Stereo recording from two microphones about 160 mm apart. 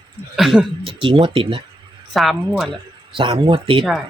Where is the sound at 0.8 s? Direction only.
35° right (ahead or behind).